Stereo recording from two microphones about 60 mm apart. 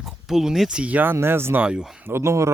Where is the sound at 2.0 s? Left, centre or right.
Right.